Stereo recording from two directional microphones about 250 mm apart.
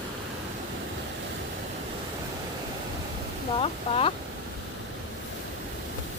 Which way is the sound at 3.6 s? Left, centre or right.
Left.